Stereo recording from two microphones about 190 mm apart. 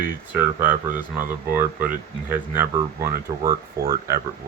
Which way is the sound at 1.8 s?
50° right (ahead or behind).